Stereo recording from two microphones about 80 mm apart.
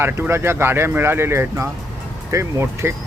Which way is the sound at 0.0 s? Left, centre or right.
Right.